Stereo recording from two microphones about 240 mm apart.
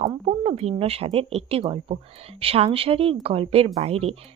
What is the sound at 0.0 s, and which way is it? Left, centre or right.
A woman's voice, right.